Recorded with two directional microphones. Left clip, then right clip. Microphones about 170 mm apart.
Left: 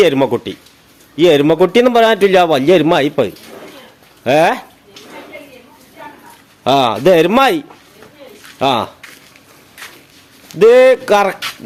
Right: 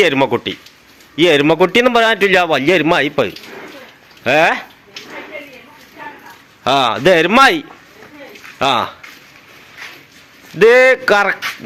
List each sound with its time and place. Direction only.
0.0 s a man's voice: 10° left (ahead or behind)
6.7 s a man's voice: 15° left (ahead or behind)
10.6 s a man's voice: 10° left (ahead or behind)